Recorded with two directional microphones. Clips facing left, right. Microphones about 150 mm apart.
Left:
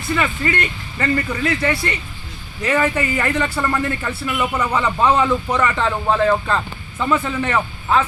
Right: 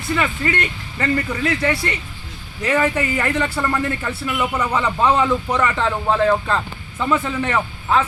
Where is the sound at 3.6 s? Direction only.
10° right (ahead or behind).